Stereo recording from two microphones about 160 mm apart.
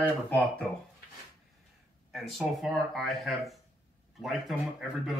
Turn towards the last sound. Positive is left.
turn(degrees=0)  # may be behind; listen again after turning